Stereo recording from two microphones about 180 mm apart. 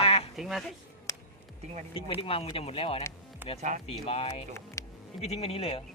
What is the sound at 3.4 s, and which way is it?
Speech, 10° right (ahead or behind).